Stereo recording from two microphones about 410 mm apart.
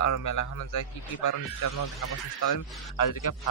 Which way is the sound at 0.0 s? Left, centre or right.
Left.